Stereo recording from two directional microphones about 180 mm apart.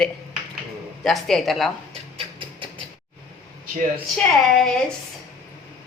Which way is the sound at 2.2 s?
30° right (ahead or behind).